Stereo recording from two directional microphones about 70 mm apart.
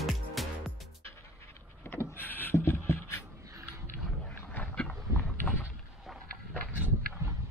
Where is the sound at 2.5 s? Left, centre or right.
Left.